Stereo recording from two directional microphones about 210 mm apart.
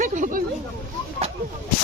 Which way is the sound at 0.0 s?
35° right (ahead or behind).